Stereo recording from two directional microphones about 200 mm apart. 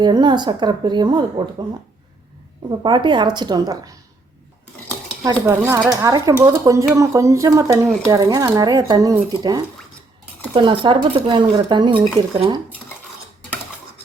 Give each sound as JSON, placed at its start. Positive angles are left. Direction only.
{"t": 0.0, "sound": "a woman's voice", "side_deg": -20}
{"t": 2.8, "sound": "a woman's voice", "side_deg": -25}
{"t": 5.2, "sound": "a woman's voice", "side_deg": -15}